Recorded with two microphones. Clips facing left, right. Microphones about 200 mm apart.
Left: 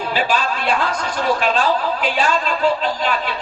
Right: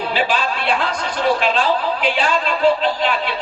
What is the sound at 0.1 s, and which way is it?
A woman's voice, 45° left (ahead or behind).